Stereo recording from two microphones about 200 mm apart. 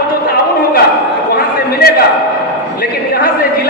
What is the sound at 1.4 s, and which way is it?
Chatter, 50° left (ahead or behind).